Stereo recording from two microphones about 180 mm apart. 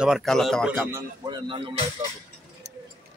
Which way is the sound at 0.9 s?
25° right (ahead or behind).